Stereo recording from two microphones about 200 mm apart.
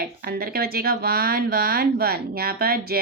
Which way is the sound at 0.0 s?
50° right (ahead or behind).